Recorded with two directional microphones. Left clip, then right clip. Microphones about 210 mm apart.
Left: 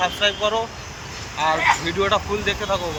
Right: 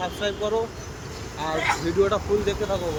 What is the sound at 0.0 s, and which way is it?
Speech, centre (ahead or behind).